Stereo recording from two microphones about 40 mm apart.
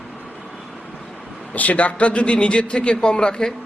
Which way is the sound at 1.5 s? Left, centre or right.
Left.